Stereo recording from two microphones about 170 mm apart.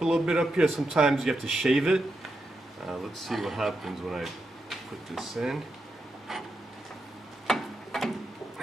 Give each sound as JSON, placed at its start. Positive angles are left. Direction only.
{"t": 0.0, "sound": "speech", "side_deg": 0}
{"t": 7.4, "sound": "tick-tock", "side_deg": 0}